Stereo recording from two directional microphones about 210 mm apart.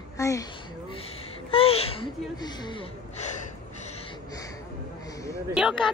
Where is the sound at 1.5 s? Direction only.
25° left (ahead or behind).